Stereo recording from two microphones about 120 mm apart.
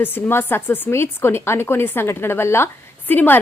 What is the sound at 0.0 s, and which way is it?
A woman's voice, 20° left (ahead or behind).